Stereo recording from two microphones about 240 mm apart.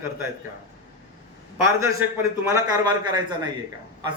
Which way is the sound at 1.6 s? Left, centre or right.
Centre.